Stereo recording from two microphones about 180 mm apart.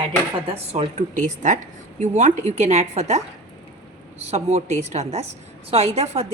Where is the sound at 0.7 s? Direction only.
40° right (ahead or behind).